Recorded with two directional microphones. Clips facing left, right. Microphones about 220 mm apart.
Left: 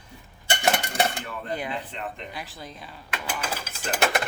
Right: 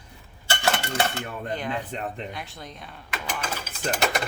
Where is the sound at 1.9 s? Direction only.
40° right (ahead or behind).